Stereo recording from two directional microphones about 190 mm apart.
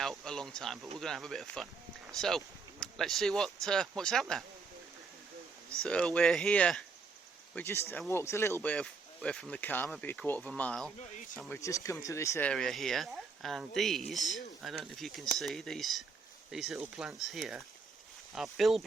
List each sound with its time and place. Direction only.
0.0 s speech: centre (ahead or behind)
5.8 s speech: 5° left (ahead or behind)
11.0 s speech: 40° left (ahead or behind)
11.3 s speech: 10° left (ahead or behind)